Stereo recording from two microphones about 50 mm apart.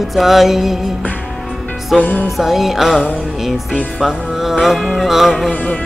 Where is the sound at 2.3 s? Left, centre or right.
Centre.